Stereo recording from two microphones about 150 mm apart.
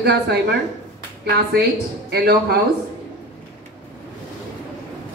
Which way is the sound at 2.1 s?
90° right.